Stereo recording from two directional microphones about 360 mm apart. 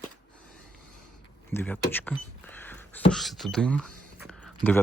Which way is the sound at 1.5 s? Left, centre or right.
Centre.